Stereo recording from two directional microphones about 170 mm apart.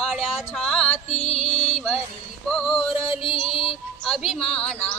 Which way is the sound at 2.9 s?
35° left (ahead or behind).